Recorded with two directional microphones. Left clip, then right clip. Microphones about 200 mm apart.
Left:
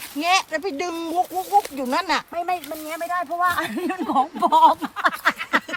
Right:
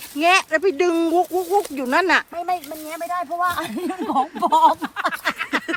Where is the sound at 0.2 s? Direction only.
40° left (ahead or behind).